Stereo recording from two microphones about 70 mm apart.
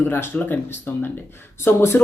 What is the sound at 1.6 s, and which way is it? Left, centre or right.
Speech, left.